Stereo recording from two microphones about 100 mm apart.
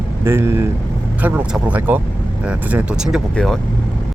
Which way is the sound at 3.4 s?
5° left (ahead or behind).